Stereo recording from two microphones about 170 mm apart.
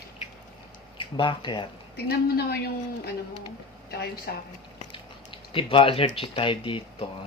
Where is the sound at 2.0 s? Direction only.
65° left (ahead or behind).